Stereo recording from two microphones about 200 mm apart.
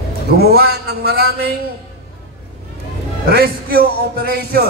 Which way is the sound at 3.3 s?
50° right (ahead or behind).